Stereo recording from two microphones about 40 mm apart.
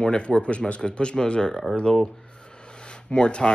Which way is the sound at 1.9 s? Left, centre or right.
Left.